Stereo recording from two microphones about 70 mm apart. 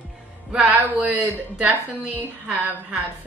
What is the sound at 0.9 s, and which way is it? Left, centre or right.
A woman's voice, right.